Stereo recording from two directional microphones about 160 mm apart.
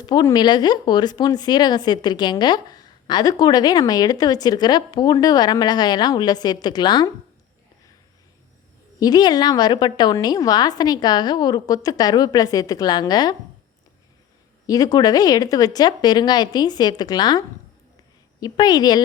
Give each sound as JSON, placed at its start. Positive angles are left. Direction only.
{"t": 0.0, "sound": "speech", "side_deg": 25}
{"t": 9.0, "sound": "speech", "side_deg": 25}
{"t": 14.7, "sound": "speech", "side_deg": 25}